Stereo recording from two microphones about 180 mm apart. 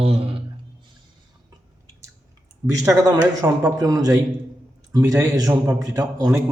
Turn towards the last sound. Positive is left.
turn(degrees=-20)  # may be behind; listen again after turning